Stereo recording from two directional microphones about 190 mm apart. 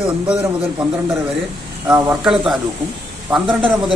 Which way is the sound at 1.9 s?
15° right (ahead or behind).